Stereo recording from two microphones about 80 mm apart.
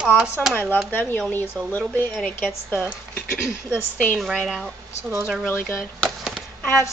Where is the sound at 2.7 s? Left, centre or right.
Left.